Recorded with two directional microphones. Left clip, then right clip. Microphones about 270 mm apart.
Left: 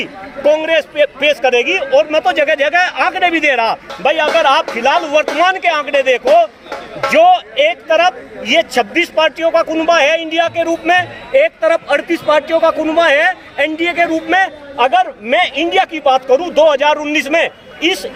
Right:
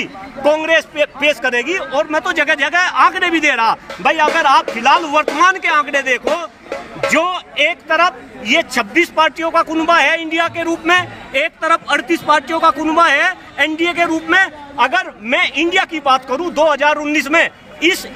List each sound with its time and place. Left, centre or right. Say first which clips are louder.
0.0 s a man's voice: left 2 dB; centre
1.5 s a man's voice: left 5 dB; right
2.1 s a man's voice: left 3 dB; centre